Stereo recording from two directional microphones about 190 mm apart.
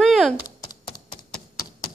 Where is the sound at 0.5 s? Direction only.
20° left (ahead or behind).